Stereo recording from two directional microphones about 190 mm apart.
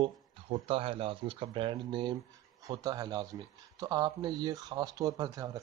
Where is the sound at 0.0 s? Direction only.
30° right (ahead or behind).